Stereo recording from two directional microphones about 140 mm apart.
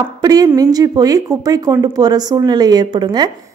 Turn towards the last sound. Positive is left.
turn(degrees=-30)  # may be behind; listen again after turning